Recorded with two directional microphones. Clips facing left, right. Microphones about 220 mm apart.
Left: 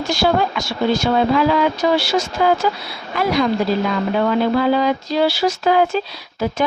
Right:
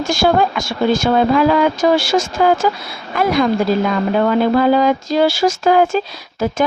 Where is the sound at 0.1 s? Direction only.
50° right (ahead or behind).